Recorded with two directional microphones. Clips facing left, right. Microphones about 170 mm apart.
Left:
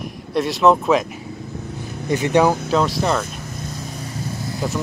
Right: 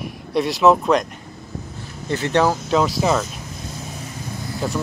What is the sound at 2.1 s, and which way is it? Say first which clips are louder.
Speech: left 2 dB; 15° left (ahead or behind).